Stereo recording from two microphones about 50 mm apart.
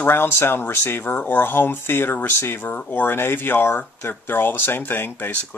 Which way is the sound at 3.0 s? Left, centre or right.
Left.